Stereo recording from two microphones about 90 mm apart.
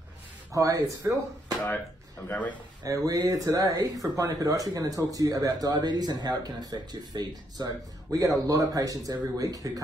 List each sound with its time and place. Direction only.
0.5 s speech: 40° right (ahead or behind)
2.2 s a man's voice: 15° left (ahead or behind)
2.8 s speech: 45° right (ahead or behind)